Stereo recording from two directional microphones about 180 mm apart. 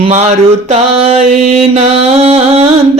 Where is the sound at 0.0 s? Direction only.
40° right (ahead or behind).